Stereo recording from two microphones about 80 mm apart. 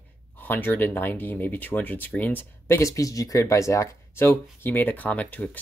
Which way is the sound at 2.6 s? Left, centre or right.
Left.